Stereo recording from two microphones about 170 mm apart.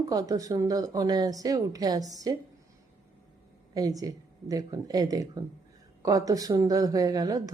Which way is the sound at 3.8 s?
20° right (ahead or behind).